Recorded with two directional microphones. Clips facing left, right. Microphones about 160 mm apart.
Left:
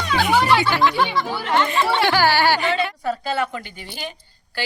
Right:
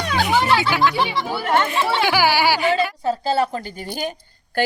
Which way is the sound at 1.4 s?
50° right (ahead or behind).